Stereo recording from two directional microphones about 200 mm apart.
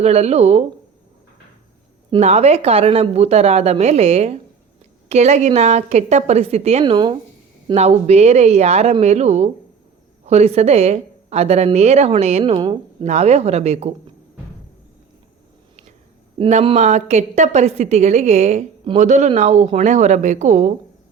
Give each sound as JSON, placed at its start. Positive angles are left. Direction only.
{"t": 0.0, "sound": "a woman's voice", "side_deg": -30}
{"t": 2.0, "sound": "a woman's voice", "side_deg": -30}
{"t": 16.4, "sound": "a woman's voice", "side_deg": -30}